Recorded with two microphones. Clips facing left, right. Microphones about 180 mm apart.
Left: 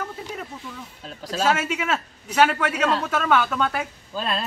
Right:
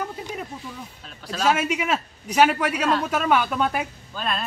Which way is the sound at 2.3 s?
15° right (ahead or behind).